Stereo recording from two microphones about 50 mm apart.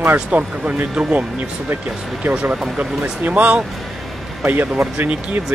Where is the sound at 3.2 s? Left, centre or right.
Right.